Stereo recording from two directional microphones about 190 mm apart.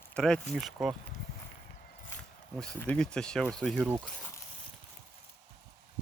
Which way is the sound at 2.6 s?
5° left (ahead or behind).